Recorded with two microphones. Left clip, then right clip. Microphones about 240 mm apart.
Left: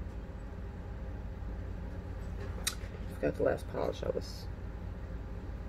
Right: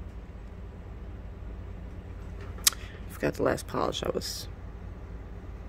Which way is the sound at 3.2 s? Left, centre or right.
Right.